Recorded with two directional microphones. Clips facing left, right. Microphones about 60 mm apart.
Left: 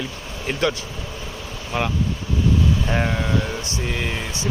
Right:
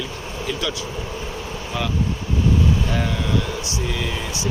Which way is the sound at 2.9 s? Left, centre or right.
Left.